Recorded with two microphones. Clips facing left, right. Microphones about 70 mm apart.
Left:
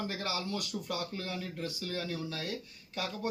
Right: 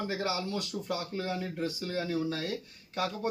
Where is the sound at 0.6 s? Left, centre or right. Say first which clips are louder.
Right 2 dB; right.